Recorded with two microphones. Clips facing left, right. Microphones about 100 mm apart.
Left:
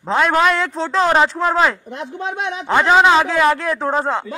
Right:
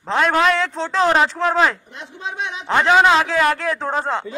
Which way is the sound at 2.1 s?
45° left (ahead or behind).